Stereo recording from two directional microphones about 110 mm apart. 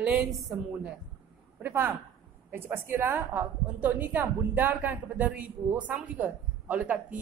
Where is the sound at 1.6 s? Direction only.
20° right (ahead or behind).